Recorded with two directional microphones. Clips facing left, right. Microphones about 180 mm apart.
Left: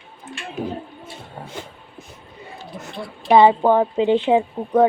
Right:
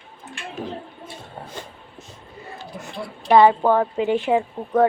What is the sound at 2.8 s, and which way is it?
Speech, centre (ahead or behind).